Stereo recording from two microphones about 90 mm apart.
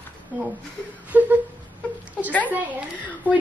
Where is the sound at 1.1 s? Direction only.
20° right (ahead or behind).